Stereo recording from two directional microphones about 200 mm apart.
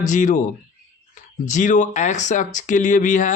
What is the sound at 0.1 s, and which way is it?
Speech, 40° left (ahead or behind).